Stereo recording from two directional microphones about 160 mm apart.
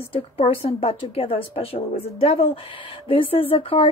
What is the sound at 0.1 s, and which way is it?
Speech, 35° left (ahead or behind).